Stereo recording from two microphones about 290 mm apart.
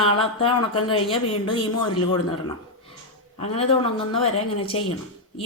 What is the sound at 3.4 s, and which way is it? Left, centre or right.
Speech, centre.